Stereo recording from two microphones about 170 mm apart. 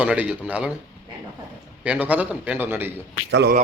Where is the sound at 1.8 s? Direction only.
10° right (ahead or behind).